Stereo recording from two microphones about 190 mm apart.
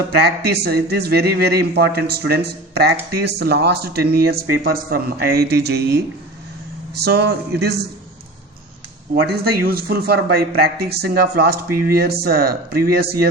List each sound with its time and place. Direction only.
0.2 s a man's voice: 60° right (ahead or behind)
9.2 s a man's voice: 55° right (ahead or behind)